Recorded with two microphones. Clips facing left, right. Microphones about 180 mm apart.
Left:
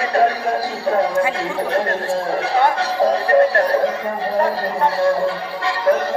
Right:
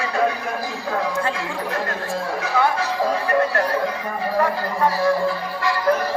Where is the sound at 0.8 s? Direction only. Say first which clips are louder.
Left 7 dB; 30° left (ahead or behind).